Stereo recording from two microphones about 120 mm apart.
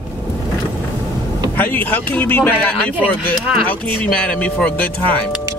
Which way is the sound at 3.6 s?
10° left (ahead or behind).